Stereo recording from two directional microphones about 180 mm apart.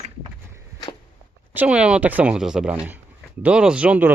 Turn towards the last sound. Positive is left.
turn(degrees=-5)  # may be behind; listen again after turning